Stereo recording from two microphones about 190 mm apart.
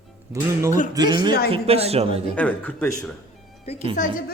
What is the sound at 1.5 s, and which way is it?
Speech, 30° right (ahead or behind).